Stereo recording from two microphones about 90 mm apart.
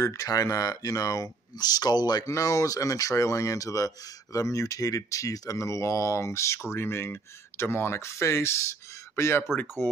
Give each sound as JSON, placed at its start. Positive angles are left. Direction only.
{"t": 0.0, "sound": "speech", "side_deg": 35}
{"t": 2.2, "sound": "speech", "side_deg": 35}